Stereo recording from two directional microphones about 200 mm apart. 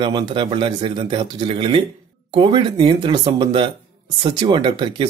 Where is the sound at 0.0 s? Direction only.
25° right (ahead or behind).